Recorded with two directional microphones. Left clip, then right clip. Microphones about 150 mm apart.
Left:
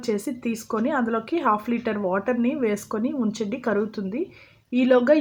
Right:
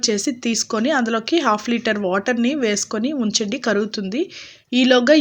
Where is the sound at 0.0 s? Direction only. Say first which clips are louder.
Right 6 dB; 25° right (ahead or behind).